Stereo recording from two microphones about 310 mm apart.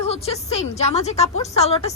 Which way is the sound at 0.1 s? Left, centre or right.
Centre.